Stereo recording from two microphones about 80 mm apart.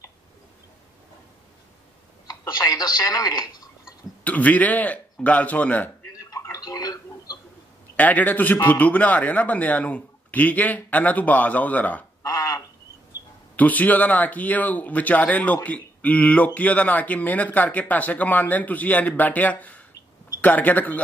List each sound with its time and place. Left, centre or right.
2.2 s telephone: left
4.2 s speech: centre
6.1 s a sound: left
7.9 s speech: left
12.2 s frog: left
13.6 s speech: left